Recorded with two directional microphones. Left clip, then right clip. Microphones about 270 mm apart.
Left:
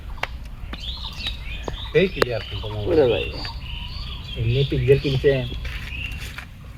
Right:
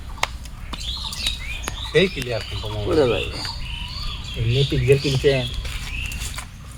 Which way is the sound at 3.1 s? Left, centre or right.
Right.